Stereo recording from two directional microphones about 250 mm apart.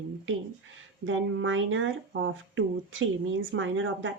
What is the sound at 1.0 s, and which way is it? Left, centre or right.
Speech, right.